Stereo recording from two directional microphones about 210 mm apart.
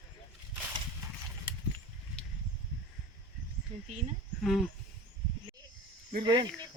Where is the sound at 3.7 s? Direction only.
35° right (ahead or behind).